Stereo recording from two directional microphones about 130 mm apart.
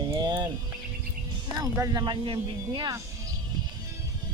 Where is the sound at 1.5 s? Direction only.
30° right (ahead or behind).